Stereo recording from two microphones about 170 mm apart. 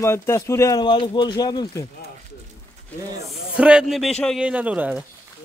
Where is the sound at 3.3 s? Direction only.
5° right (ahead or behind).